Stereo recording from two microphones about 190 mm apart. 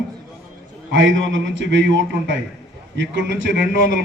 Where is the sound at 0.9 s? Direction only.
85° right.